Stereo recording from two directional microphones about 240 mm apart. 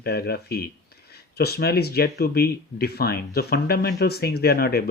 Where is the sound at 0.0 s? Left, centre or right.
Left.